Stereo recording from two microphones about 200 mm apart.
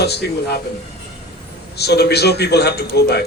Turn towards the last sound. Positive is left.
turn(degrees=55)  # may be behind; listen again after turning